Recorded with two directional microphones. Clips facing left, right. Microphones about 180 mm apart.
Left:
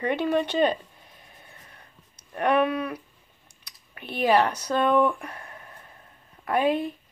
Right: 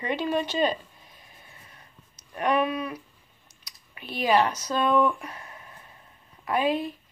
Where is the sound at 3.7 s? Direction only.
55° left (ahead or behind).